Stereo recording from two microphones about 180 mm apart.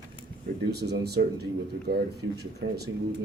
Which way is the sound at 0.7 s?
65° right (ahead or behind).